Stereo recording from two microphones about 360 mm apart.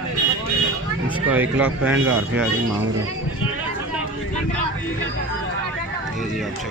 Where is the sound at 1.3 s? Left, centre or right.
Centre.